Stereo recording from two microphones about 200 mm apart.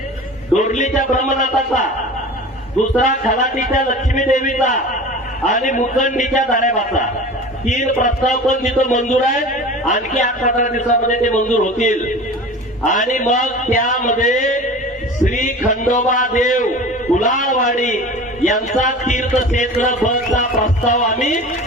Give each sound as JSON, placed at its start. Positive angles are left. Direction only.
{"t": 0.5, "sound": "a man's voice", "side_deg": 35}
{"t": 3.0, "sound": "a man's voice", "side_deg": 35}